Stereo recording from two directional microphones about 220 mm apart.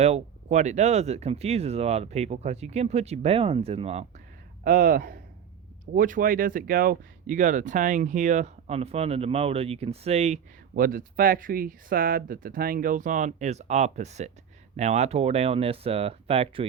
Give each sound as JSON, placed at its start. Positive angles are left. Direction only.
{"t": 0.0, "sound": "speech", "side_deg": -30}
{"t": 4.6, "sound": "speech", "side_deg": -40}